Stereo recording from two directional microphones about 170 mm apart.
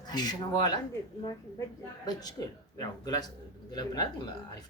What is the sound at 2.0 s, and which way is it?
Speech, 25° left (ahead or behind).